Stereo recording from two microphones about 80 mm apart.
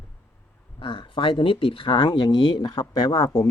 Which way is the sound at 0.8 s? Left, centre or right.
Left.